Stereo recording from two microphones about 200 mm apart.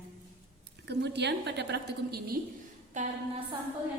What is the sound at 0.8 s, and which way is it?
A woman's voice, 60° right (ahead or behind).